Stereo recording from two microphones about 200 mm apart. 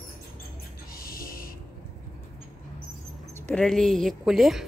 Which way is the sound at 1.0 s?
45° left (ahead or behind).